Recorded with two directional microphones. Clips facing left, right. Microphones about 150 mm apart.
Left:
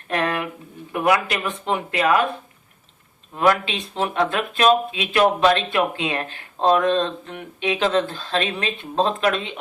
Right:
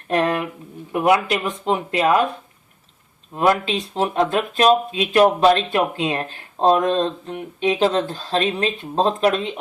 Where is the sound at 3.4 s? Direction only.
35° right (ahead or behind).